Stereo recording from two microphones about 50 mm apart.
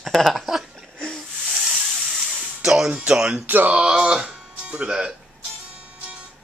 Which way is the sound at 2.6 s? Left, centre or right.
Centre.